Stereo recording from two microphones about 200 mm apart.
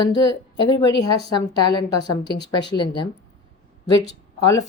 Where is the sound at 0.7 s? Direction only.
20° left (ahead or behind).